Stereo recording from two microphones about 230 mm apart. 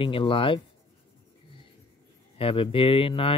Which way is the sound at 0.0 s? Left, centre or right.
Left.